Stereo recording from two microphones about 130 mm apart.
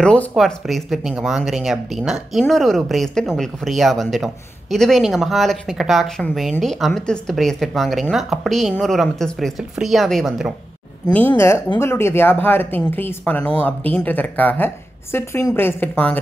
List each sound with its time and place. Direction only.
0.0 s speech: 5° left (ahead or behind)
11.1 s speech: 20° left (ahead or behind)